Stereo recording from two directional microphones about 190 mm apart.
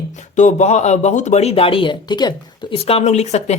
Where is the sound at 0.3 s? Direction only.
40° left (ahead or behind).